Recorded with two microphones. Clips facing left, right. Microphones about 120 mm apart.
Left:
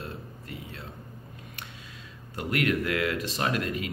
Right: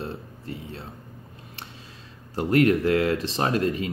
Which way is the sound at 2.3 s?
30° right (ahead or behind).